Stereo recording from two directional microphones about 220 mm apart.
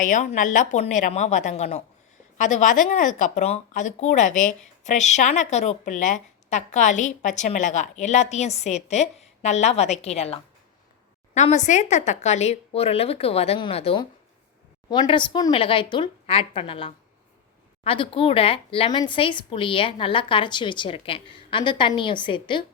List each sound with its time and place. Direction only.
0.0 s speech: 35° left (ahead or behind)